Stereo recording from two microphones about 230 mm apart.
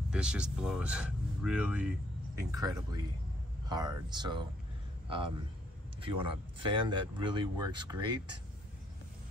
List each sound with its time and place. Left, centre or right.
0.1 s speech: centre
2.5 s a man's voice: centre